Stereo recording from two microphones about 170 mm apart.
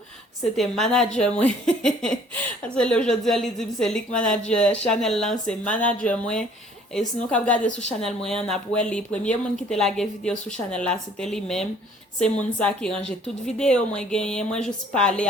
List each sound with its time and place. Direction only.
0.5 s a woman's voice: centre (ahead or behind)